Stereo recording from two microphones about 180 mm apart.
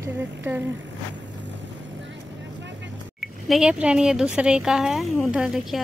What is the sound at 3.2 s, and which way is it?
Speech, 5° right (ahead or behind).